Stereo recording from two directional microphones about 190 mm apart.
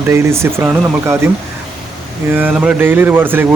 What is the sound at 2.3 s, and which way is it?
Speech, 10° right (ahead or behind).